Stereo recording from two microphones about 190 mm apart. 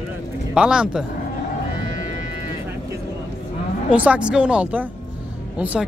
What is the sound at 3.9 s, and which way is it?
Speech, 5° right (ahead or behind).